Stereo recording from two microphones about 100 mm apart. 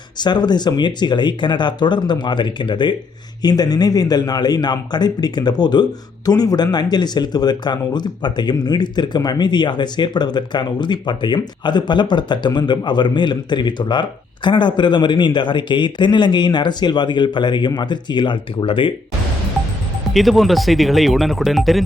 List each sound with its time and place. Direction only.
0.2 s speech: 45° left (ahead or behind)
20.1 s speech: centre (ahead or behind)